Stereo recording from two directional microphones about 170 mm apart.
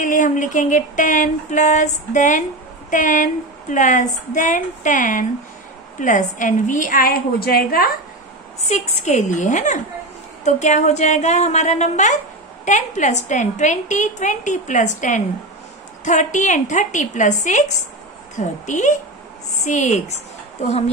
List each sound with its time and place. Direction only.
0.0 s a woman's voice: 50° left (ahead or behind); by 7.9 s 65° left (ahead or behind)
8.5 s a woman's voice: 40° left (ahead or behind)